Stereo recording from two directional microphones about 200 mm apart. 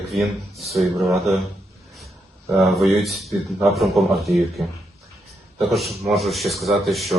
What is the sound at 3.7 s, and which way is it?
Speech, centre (ahead or behind).